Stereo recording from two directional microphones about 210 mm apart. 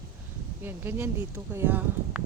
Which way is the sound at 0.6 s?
10° right (ahead or behind).